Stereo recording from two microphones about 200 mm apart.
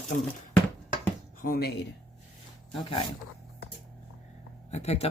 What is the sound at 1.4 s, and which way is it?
Speech, 50° left (ahead or behind).